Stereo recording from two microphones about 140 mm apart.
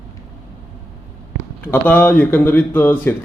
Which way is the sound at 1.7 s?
10° left (ahead or behind).